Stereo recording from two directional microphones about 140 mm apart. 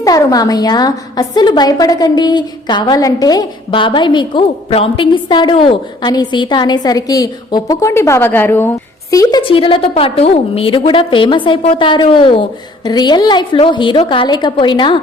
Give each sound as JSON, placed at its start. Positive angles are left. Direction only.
{"t": 0.0, "sound": "a woman's voice", "side_deg": 25}
{"t": 9.4, "sound": "a woman's voice", "side_deg": 40}